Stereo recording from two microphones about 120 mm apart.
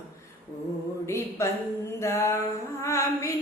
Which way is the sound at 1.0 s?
25° left (ahead or behind).